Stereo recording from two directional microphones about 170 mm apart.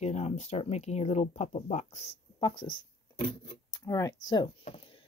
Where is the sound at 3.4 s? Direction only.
20° left (ahead or behind).